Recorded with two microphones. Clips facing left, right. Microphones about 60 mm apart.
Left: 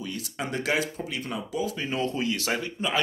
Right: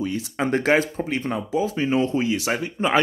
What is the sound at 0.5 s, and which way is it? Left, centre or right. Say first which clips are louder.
Speech: right 8 dB; right.